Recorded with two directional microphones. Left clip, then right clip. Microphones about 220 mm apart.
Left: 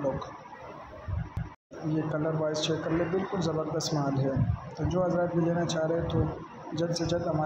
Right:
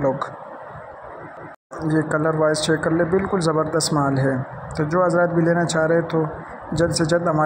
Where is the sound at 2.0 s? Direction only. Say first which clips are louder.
Right 11 dB; 25° right (ahead or behind).